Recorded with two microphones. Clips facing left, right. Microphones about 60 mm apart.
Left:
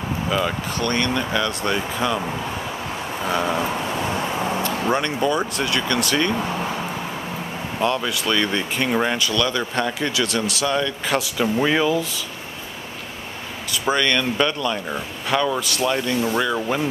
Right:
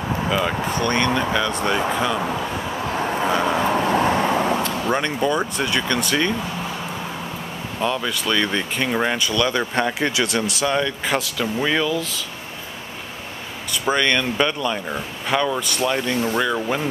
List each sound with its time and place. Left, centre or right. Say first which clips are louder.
0.3 s speech: right 1 dB; centre
0.7 s speech: right 2 dB; centre
3.3 s speech: even; centre
3.9 s vehicle: right 6 dB; right
4.6 s vehicle: left 1 dB; centre
5.0 s speech: even; centre
7.8 s speech: left 1 dB; centre
11.1 s speech: left 6 dB; centre
13.9 s speech: right 1 dB; centre